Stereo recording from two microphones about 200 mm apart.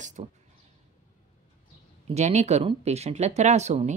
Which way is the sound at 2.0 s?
35° right (ahead or behind).